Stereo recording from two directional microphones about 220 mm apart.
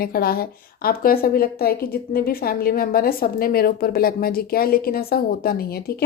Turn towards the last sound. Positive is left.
turn(degrees=45)  # may be behind; listen again after turning